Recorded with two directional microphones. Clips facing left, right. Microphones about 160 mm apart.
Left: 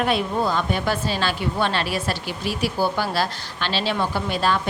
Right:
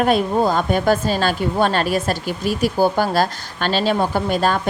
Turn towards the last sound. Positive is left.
turn(degrees=-45)  # may be behind; listen again after turning